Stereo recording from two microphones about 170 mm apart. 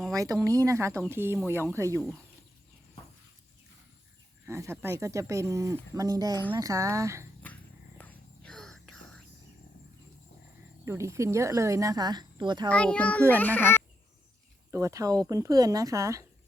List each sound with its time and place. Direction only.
0.1 s a sound: 20° right (ahead or behind)
0.4 s speech: 20° right (ahead or behind)
4.4 s speech: 15° right (ahead or behind)
7.4 s whispering: 10° left (ahead or behind)
10.8 s speech: 15° right (ahead or behind)
12.6 s a child's voice: 5° left (ahead or behind)
14.7 s speech: 15° right (ahead or behind)